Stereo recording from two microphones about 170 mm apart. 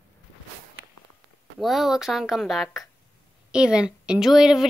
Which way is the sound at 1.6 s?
Centre (ahead or behind).